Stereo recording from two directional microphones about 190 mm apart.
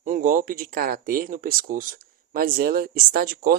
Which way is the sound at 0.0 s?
45° right (ahead or behind).